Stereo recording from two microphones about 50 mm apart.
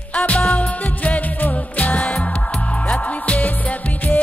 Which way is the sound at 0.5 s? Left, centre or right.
Left.